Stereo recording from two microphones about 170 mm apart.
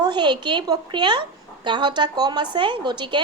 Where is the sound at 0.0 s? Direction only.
25° right (ahead or behind).